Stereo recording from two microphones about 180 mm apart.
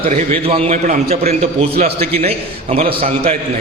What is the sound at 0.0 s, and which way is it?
A man's voice, 35° right (ahead or behind).